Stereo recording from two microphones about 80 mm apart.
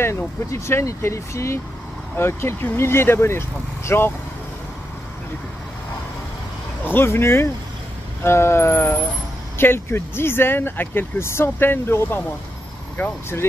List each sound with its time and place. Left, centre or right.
0.0 s speech: left
6.9 s speech: left